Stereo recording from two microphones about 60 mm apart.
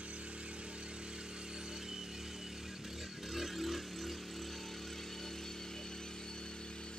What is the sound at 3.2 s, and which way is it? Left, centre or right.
Vehicle, centre.